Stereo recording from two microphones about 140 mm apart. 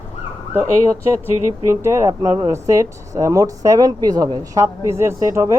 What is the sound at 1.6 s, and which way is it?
Speech, 20° right (ahead or behind).